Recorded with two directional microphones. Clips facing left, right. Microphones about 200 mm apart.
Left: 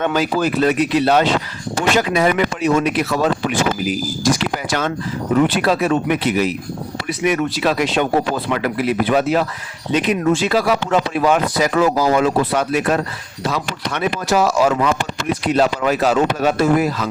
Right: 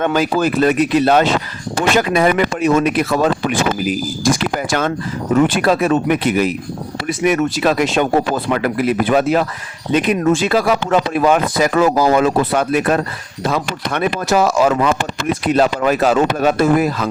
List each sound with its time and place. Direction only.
0.0 s speech: 50° right (ahead or behind)